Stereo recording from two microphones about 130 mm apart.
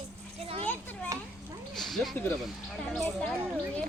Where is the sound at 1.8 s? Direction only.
Centre (ahead or behind).